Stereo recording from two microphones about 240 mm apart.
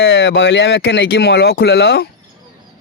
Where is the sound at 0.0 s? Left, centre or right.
Left.